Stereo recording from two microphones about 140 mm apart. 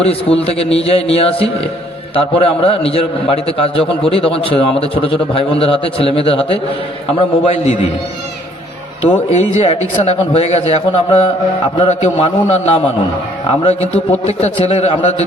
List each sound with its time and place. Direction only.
0.0 s a man's voice: 45° left (ahead or behind)
9.0 s a man's voice: 50° left (ahead or behind)
14.3 s a man's voice: 45° left (ahead or behind)